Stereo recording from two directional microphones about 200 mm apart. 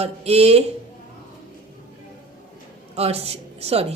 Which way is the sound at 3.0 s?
30° right (ahead or behind).